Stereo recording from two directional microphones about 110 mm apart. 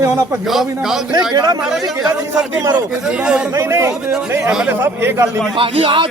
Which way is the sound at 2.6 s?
35° right (ahead or behind).